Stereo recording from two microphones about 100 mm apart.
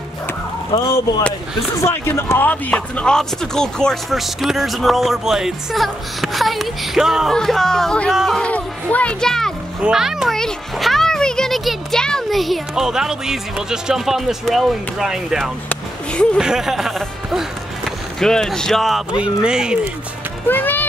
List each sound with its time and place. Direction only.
0.7 s speech: 40° left (ahead or behind)
1.8 s speech: 25° left (ahead or behind); by 8.1 s 5° left (ahead or behind)
8.1 s speech: 5° right (ahead or behind)
8.4 s speech: 15° left (ahead or behind)
9.8 s a child's voice: 5° right (ahead or behind)
15.7 s a sound: 10° left (ahead or behind)
16.3 s speech: 5° right (ahead or behind)
20.4 s speech: 20° left (ahead or behind)